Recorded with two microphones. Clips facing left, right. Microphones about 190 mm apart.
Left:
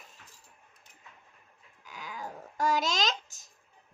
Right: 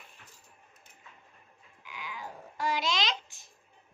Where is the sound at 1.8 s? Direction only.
45° left (ahead or behind).